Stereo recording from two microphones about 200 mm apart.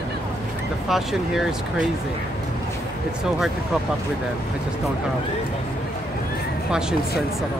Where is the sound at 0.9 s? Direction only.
Centre (ahead or behind).